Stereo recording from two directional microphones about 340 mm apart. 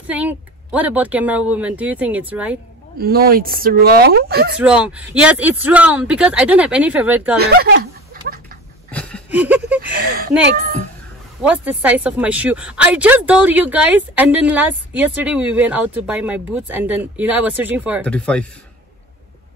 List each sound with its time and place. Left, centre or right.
0.0 s speech: centre
3.0 s speech: right
4.6 s speech: centre
7.3 s speech: right
8.9 s laughter: centre
9.9 s speech: right
11.4 s speech: centre